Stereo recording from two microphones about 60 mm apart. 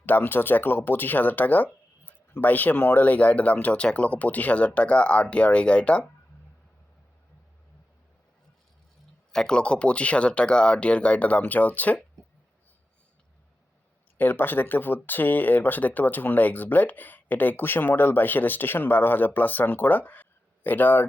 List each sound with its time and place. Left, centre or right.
0.0 s speech: left
9.3 s speech: centre
14.2 s speech: left